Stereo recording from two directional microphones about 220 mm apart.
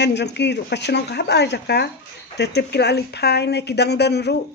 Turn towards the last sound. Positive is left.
turn(degrees=50)  # may be behind; listen again after turning